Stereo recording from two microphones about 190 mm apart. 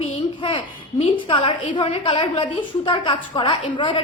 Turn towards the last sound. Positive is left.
turn(degrees=25)  # may be behind; listen again after turning